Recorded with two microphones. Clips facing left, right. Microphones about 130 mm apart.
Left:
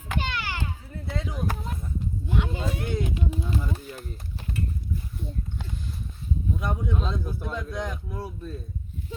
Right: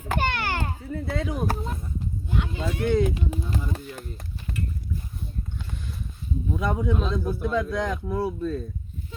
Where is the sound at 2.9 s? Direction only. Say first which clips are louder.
Right 6 dB; 85° right.